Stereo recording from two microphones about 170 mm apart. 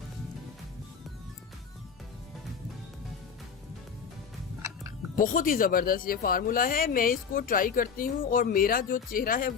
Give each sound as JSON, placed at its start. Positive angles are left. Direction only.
{"t": 5.1, "sound": "speech", "side_deg": 55}